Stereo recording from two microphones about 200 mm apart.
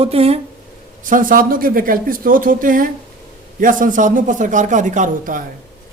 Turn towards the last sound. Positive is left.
turn(degrees=-40)  # may be behind; listen again after turning